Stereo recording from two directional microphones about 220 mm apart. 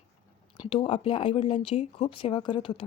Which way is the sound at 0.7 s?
25° left (ahead or behind).